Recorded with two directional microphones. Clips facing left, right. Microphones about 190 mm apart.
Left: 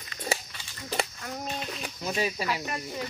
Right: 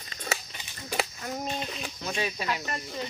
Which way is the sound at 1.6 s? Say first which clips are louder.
Even; centre (ahead or behind).